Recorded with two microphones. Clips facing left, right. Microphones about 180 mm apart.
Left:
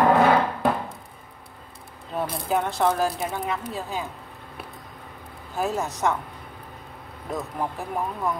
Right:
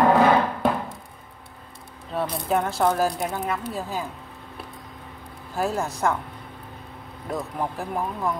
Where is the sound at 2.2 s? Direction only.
Centre (ahead or behind).